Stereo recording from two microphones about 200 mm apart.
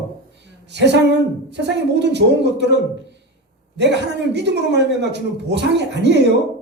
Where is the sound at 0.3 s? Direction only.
60° right (ahead or behind).